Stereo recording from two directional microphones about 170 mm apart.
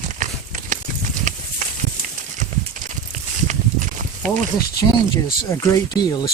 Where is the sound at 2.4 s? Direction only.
50° right (ahead or behind).